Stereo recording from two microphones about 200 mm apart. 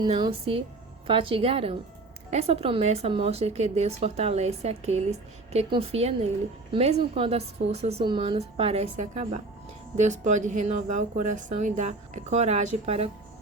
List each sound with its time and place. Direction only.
0.0 s a woman's voice: 25° right (ahead or behind)